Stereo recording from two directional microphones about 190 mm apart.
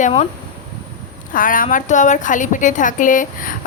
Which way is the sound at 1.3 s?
45° left (ahead or behind).